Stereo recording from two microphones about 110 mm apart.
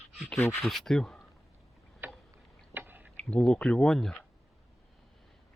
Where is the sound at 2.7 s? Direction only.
15° right (ahead or behind).